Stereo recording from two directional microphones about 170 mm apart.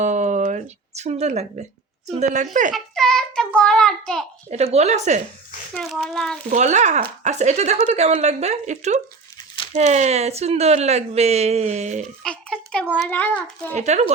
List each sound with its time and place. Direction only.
0.0 s a sound: 45° right (ahead or behind)
2.1 s speech: 45° right (ahead or behind)
2.7 s child singing: 5° left (ahead or behind)
4.4 s speech: 40° right (ahead or behind)
5.7 s a child's voice: centre (ahead or behind)
6.5 s speech: 45° right (ahead or behind)
12.2 s a child's voice: 5° left (ahead or behind)
13.7 s speech: 45° right (ahead or behind)